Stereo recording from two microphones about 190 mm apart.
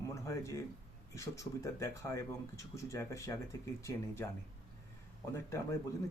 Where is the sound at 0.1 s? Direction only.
15° left (ahead or behind).